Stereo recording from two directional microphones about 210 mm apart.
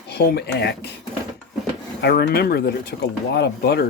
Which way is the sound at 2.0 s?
45° left (ahead or behind).